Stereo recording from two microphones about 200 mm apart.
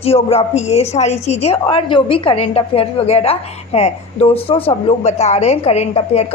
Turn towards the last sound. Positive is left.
turn(degrees=30)  # may be behind; listen again after turning